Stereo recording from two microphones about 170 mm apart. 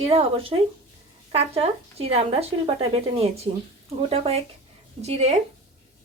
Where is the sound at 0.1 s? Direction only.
35° right (ahead or behind).